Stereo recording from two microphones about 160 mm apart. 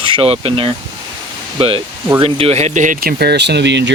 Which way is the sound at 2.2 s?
40° right (ahead or behind).